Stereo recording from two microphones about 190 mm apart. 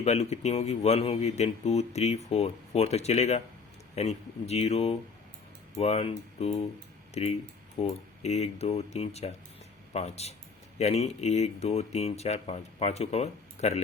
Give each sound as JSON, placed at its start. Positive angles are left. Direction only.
{"t": 0.0, "sound": "speech", "side_deg": 35}